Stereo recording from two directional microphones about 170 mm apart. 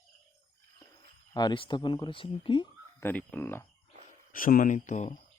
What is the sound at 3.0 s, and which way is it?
Speech, 10° left (ahead or behind).